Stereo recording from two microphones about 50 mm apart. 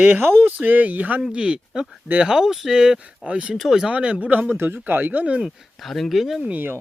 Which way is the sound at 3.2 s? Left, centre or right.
Right.